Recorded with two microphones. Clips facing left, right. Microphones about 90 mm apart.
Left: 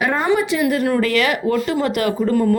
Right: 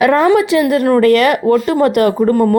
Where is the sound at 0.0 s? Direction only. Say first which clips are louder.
Right 8 dB; 85° right.